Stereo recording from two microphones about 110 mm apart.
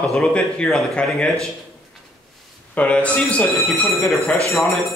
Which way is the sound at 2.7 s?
10° left (ahead or behind).